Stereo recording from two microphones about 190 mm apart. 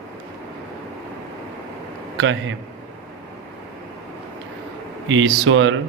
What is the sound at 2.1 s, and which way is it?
Speech, 80° right.